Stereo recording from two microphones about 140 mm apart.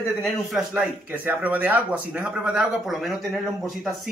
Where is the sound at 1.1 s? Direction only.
15° right (ahead or behind).